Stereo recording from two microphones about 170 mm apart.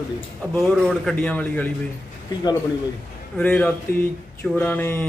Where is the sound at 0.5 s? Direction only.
5° left (ahead or behind).